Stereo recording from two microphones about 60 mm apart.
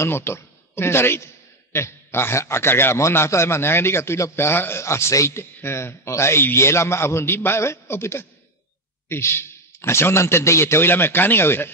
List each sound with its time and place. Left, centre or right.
0.0 s a man's voice: left